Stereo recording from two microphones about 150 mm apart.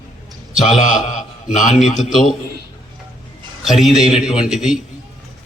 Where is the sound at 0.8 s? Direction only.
55° left (ahead or behind).